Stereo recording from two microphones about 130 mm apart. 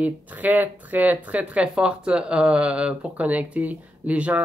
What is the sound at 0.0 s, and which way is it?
Speech, 10° right (ahead or behind).